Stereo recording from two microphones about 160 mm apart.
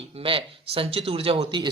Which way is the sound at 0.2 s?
35° right (ahead or behind).